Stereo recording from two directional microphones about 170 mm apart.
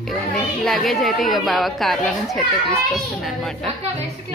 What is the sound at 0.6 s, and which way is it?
A woman's voice, centre (ahead or behind).